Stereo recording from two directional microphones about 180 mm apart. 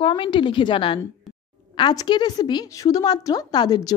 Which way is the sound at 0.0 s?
30° left (ahead or behind).